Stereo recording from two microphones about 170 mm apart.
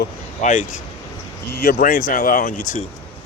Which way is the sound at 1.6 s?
60° left (ahead or behind).